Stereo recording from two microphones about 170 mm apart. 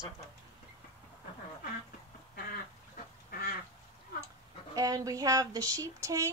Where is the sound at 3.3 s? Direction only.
60° left (ahead or behind).